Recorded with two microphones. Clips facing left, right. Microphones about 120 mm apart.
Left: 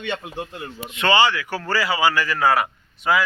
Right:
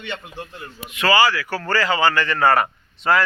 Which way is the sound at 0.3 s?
20° left (ahead or behind).